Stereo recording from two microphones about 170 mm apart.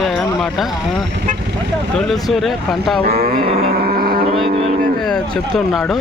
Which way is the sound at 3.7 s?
60° right (ahead or behind).